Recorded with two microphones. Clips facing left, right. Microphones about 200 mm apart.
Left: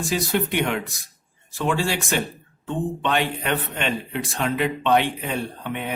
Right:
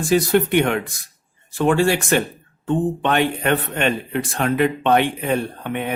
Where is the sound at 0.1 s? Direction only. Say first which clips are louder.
Right 8 dB; 55° right (ahead or behind).